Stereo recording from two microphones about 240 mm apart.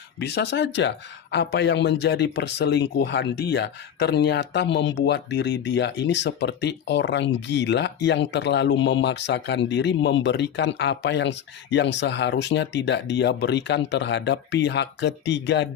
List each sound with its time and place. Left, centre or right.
0.2 s speech: left